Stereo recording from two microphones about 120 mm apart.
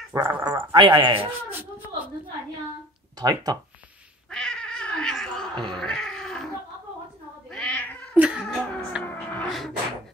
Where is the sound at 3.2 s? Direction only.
35° right (ahead or behind).